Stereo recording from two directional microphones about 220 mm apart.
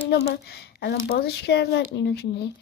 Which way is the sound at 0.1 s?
50° left (ahead or behind).